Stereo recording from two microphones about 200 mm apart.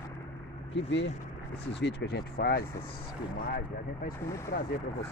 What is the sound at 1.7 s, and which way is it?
Speech, 60° left (ahead or behind).